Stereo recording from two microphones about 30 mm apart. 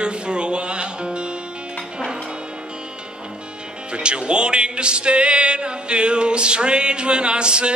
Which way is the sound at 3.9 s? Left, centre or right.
Right.